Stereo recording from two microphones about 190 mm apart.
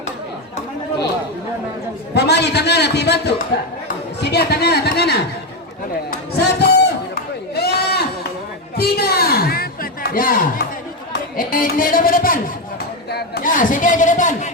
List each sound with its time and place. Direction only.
2.1 s a man's voice: 60° left (ahead or behind)
7.5 s sheep: 55° left (ahead or behind)
8.8 s a sound: 55° left (ahead or behind)
11.3 s a man's voice: 45° left (ahead or behind)
13.1 s a man's voice: 60° left (ahead or behind); by 14.5 s 40° left (ahead or behind)